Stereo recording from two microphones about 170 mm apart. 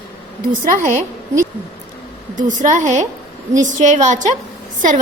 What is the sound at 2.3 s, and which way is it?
A woman's voice, 45° right (ahead or behind).